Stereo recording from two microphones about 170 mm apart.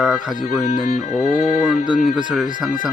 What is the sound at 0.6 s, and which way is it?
Music, 40° left (ahead or behind).